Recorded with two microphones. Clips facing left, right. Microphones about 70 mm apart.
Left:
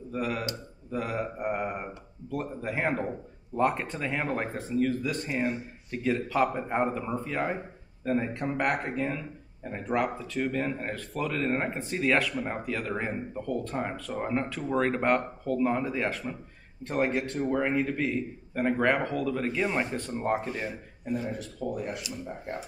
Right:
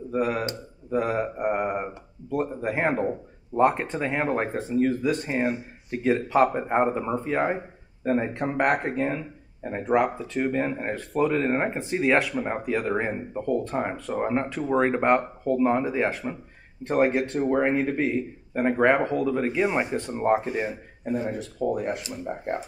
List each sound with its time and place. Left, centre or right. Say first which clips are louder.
0.1 s a sound: right 6 dB; right
3.5 s speech: right 5 dB; right
21.0 s speech: right 4 dB; right